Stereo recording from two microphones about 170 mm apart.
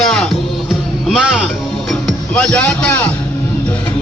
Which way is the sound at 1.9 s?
5° left (ahead or behind).